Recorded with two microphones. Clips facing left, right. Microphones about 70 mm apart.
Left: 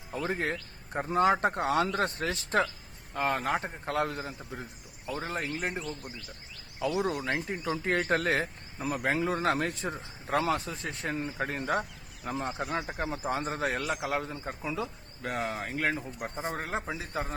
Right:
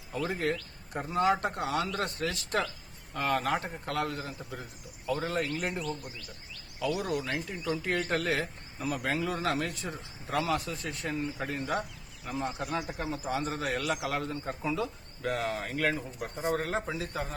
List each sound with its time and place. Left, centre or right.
0.1 s a man's voice: left
8.8 s speech: left
14.1 s a man's voice: centre
16.3 s speech: centre
16.9 s a man's voice: left